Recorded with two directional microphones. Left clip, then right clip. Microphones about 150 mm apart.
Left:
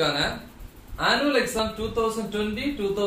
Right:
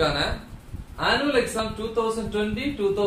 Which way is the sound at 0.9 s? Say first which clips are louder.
Even; 15° right (ahead or behind).